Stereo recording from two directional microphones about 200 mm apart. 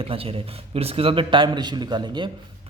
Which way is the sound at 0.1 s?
30° right (ahead or behind).